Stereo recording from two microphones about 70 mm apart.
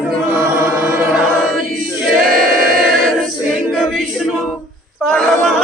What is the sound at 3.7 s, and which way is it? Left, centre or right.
Choir, centre.